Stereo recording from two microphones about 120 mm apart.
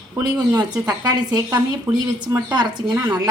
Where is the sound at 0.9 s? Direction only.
35° right (ahead or behind).